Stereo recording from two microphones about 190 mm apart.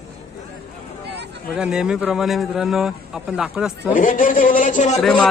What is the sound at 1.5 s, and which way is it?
Speech, 5° right (ahead or behind).